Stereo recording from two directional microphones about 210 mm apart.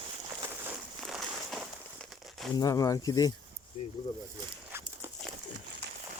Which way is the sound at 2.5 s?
15° left (ahead or behind).